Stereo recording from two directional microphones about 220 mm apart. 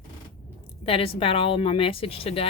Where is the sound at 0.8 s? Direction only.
25° left (ahead or behind).